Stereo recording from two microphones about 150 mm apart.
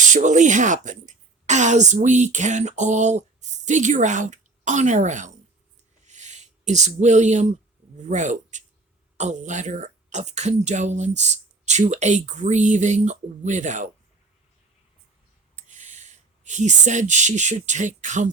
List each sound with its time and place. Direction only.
0.0 s a woman's voice: 55° right (ahead or behind)
6.1 s a sound: 50° right (ahead or behind)
8.0 s speech: 55° right (ahead or behind)
15.5 s speech: 50° right (ahead or behind)